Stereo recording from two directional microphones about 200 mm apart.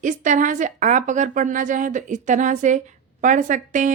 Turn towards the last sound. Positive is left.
turn(degrees=-40)  # may be behind; listen again after turning